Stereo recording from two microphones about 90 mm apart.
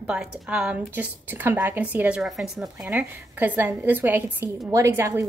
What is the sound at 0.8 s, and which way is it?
A woman's voice, 20° right (ahead or behind).